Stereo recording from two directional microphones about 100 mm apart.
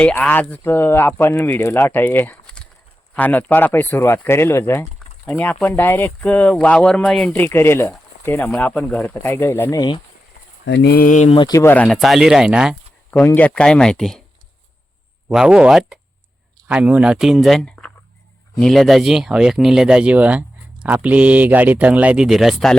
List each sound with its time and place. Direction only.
0.0 s speech: 15° left (ahead or behind)
7.3 s speech: 20° left (ahead or behind)
8.4 s speech: 10° left (ahead or behind)
9.7 s speech: 45° left (ahead or behind)
11.5 s speech: 30° left (ahead or behind)
11.9 s speech: centre (ahead or behind)
13.2 s speech: 15° left (ahead or behind)
15.3 s speech: 5° right (ahead or behind)